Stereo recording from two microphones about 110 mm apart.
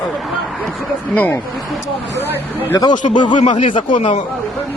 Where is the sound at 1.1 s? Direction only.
15° left (ahead or behind).